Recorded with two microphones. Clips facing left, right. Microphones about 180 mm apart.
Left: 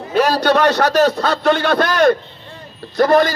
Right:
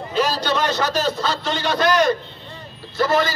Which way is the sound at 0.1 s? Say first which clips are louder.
Left 7 dB; 65° left (ahead or behind).